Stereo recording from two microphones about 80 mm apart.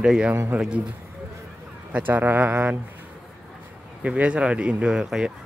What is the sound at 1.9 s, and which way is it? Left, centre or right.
Speech, right.